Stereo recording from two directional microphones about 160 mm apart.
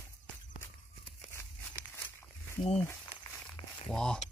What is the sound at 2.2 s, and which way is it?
Walk, 15° left (ahead or behind).